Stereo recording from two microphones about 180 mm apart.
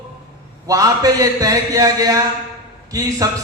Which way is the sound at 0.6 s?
20° right (ahead or behind).